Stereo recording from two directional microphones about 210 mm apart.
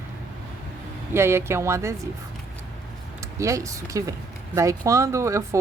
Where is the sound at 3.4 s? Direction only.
15° right (ahead or behind).